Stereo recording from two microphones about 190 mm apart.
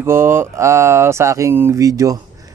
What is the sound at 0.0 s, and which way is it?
Speech, 10° right (ahead or behind).